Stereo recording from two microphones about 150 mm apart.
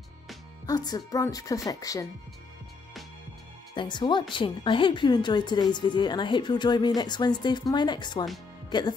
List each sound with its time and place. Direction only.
0.7 s speech: 25° left (ahead or behind)
3.7 s a woman's voice: 30° left (ahead or behind)
8.6 s music: 30° left (ahead or behind)